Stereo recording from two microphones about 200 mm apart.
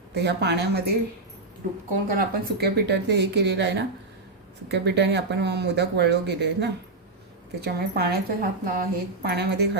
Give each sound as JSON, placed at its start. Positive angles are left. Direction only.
{"t": 0.1, "sound": "speech", "side_deg": -55}
{"t": 2.0, "sound": "speech", "side_deg": -50}